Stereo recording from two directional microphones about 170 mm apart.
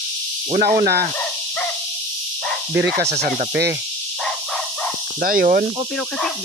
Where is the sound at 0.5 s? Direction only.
65° right (ahead or behind).